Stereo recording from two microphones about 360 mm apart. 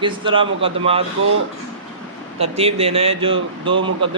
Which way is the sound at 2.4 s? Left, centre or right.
Centre.